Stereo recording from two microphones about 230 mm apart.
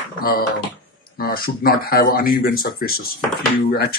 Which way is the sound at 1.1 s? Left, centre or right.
Left.